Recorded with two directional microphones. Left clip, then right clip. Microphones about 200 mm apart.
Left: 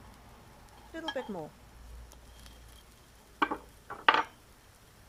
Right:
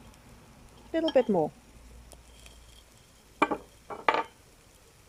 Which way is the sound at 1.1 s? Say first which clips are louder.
Right 16 dB; 40° right (ahead or behind).